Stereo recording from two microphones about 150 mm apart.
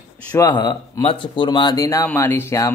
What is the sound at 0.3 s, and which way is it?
Speech, 25° left (ahead or behind).